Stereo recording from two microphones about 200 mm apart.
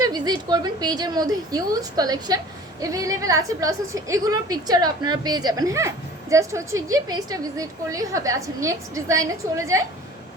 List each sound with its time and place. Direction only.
0.0 s a woman's voice: 20° right (ahead or behind)